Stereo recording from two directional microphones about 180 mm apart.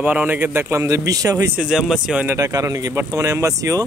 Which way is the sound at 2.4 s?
20° right (ahead or behind).